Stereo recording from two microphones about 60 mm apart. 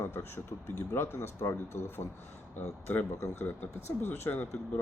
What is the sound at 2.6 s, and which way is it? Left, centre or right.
Speech, left.